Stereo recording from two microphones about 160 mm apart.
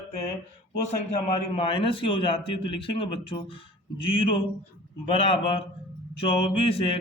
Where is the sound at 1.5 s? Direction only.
35° left (ahead or behind).